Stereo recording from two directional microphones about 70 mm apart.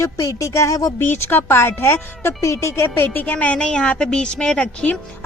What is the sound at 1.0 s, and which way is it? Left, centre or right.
Speech, left.